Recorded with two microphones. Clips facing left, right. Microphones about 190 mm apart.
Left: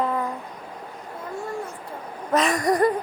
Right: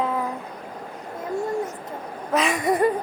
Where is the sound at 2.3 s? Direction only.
Centre (ahead or behind).